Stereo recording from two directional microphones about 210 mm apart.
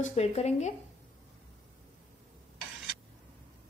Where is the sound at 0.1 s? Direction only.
30° left (ahead or behind).